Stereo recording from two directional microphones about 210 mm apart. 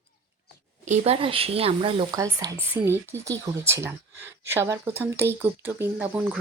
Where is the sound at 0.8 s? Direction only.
30° right (ahead or behind).